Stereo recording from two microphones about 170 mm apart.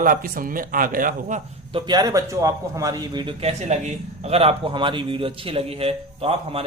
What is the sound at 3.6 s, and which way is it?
A man's voice, 40° right (ahead or behind).